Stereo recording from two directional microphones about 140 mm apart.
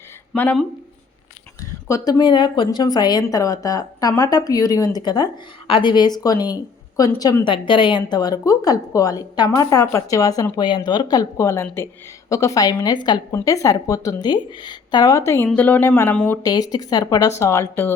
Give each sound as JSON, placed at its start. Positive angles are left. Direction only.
{"t": 0.3, "sound": "speech", "side_deg": 10}
{"t": 1.9, "sound": "a woman's voice", "side_deg": 30}
{"t": 16.4, "sound": "a woman's voice", "side_deg": 25}